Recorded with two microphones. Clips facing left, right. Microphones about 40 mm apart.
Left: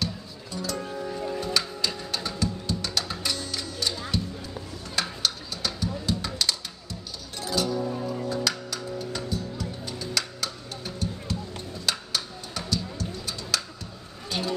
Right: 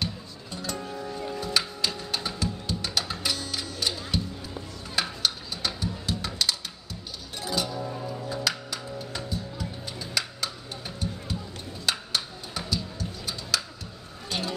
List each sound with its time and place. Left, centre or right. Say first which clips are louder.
0.0 s music: left 1 dB; centre
0.7 s music: left 2 dB; centre
1.5 s music: even; centre
4.9 s a sound: even; centre
5.9 s music: left 2 dB; centre
8.5 s music: left 1 dB; centre
14.3 s a sound: left 1 dB; centre